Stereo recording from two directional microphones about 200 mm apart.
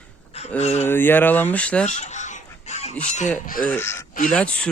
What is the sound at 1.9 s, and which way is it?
Fowl, 35° left (ahead or behind).